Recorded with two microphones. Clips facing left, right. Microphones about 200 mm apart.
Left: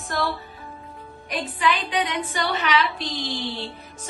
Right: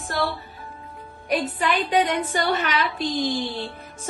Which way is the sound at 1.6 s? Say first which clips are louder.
Even; 45° right (ahead or behind).